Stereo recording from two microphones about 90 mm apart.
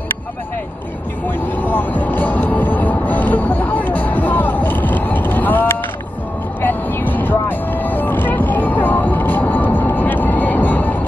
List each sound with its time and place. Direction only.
1.4 s vehicle: 20° left (ahead or behind)